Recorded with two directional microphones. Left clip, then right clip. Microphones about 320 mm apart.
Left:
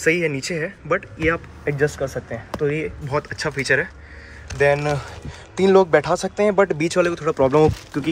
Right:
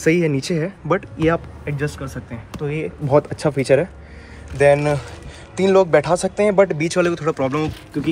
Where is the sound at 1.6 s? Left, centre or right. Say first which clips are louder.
Left 5 dB; centre.